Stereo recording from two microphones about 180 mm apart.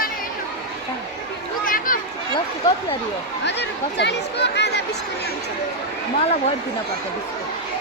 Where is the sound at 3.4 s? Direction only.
70° left (ahead or behind).